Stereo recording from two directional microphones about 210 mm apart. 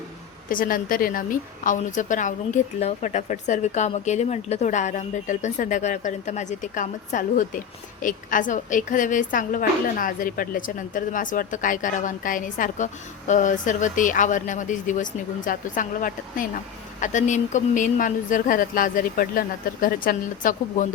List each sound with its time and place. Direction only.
0.4 s a woman's voice: 40° left (ahead or behind)